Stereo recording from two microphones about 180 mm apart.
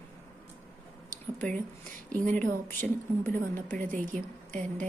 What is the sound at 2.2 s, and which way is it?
Speech, 45° right (ahead or behind).